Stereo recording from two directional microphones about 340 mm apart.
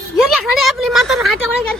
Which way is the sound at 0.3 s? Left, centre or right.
Centre.